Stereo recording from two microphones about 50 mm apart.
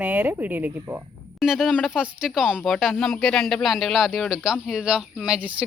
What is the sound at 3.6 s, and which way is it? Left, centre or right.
Speech, centre.